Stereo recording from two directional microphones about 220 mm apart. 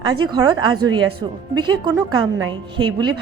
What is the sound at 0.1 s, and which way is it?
A woman's voice, 20° right (ahead or behind).